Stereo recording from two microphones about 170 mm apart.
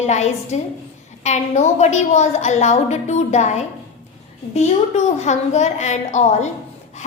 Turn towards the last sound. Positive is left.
turn(degrees=40)  # may be behind; listen again after turning